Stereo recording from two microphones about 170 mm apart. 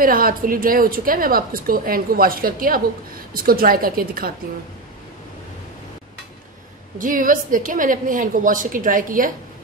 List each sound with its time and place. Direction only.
0.0 s a woman's voice: 55° right (ahead or behind)
7.0 s a woman's voice: 50° right (ahead or behind)